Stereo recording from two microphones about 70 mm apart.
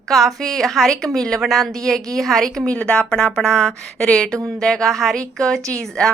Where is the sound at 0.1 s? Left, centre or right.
Centre.